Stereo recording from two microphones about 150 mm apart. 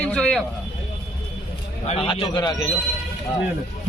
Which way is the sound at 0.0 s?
5° left (ahead or behind).